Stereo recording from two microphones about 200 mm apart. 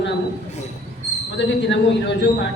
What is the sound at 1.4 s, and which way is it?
Speech, 65° left (ahead or behind).